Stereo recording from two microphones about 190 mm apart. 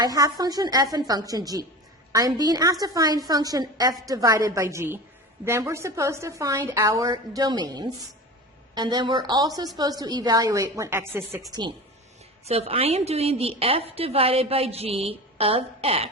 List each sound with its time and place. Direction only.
0.0 s a woman's voice: 20° right (ahead or behind)
12.5 s a woman's voice: 30° right (ahead or behind)